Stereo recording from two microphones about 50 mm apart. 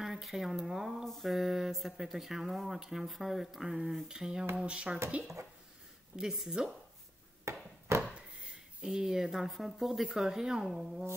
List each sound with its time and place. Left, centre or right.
0.0 s speech: centre
6.1 s speech: centre
7.5 s a sound: right
7.9 s wood: right
8.8 s speech: centre